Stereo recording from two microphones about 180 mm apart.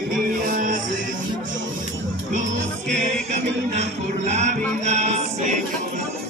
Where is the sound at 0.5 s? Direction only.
45° right (ahead or behind).